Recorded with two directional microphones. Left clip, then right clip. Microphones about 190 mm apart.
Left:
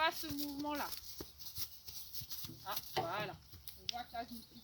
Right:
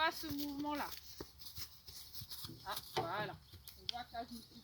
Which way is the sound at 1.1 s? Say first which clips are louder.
Left 2 dB; 10° left (ahead or behind).